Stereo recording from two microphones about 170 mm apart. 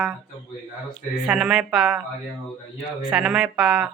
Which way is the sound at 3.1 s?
5° right (ahead or behind).